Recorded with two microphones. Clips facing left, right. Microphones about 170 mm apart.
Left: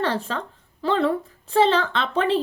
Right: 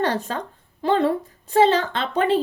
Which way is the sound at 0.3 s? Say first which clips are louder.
Right 1 dB; 15° right (ahead or behind).